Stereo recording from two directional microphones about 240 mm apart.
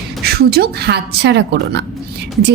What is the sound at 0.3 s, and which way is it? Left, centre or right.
A woman's voice, right.